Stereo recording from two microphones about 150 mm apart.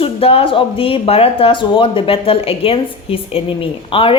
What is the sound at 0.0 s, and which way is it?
Speech, 40° left (ahead or behind).